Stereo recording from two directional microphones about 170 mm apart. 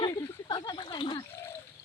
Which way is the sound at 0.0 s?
20° left (ahead or behind).